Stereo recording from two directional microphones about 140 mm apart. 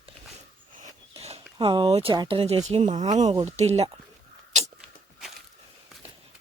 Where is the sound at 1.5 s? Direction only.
35° right (ahead or behind).